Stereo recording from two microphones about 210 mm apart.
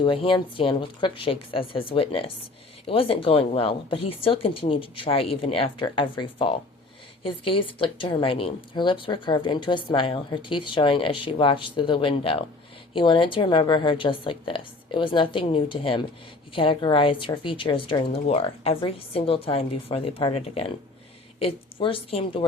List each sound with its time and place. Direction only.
0.0 s speech: 25° left (ahead or behind)